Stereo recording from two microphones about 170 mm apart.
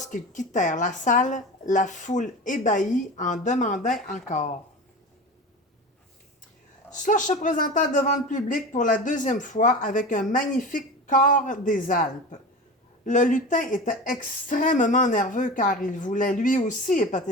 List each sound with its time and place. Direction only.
0.0 s speech: 45° left (ahead or behind)
6.9 s speech: 50° left (ahead or behind)